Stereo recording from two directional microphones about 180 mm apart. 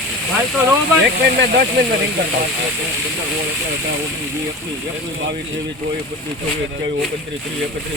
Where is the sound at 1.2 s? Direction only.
70° right (ahead or behind).